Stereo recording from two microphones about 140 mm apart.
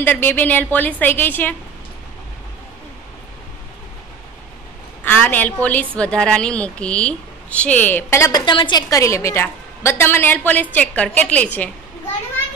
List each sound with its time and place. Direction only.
0.0 s a woman's voice: 15° left (ahead or behind)
5.0 s a woman's voice: 15° left (ahead or behind)
8.3 s a woman's voice: 35° left (ahead or behind); by 11.7 s 10° left (ahead or behind)